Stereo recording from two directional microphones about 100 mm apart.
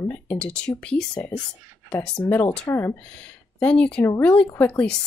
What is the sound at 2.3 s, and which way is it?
Speech, 15° left (ahead or behind).